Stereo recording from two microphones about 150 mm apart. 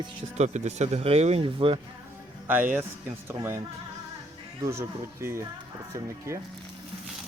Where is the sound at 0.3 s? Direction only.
50° right (ahead or behind).